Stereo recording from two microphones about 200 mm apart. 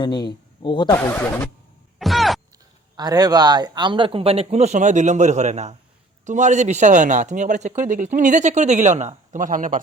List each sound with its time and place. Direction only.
0.0 s a man's voice: 20° left (ahead or behind)
0.9 s speech: 10° left (ahead or behind)
2.0 s groan: centre (ahead or behind)
2.9 s a man's voice: 20° right (ahead or behind); by 9.8 s 40° right (ahead or behind)